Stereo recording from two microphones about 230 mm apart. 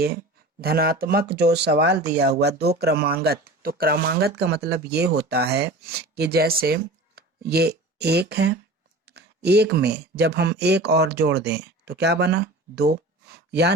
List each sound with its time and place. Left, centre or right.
0.6 s speech: right